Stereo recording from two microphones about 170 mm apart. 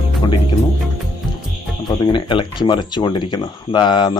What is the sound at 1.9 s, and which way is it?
Speech, 25° left (ahead or behind).